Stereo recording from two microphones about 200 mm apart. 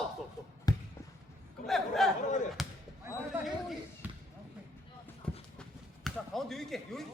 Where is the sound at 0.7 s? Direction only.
20° left (ahead or behind).